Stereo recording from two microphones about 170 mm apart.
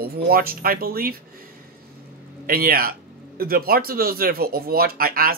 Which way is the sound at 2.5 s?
60° right (ahead or behind).